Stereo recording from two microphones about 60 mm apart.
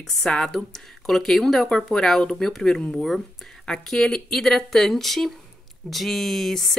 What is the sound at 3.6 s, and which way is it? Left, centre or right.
Speech, centre.